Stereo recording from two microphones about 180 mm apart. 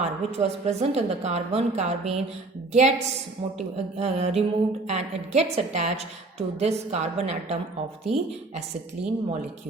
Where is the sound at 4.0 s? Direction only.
35° right (ahead or behind).